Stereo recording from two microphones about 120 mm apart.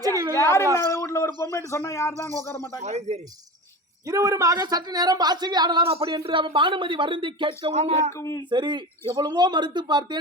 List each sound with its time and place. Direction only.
0.0 s a sound: 30° right (ahead or behind)
0.3 s a man's voice: 25° left (ahead or behind)
2.8 s speech: 70° right (ahead or behind)
4.0 s a woman's voice: 25° right (ahead or behind)
5.9 s speech: 50° right (ahead or behind)
7.7 s speech: 65° right (ahead or behind)
8.1 s speech: 25° left (ahead or behind)
8.4 s a woman's voice: 40° right (ahead or behind)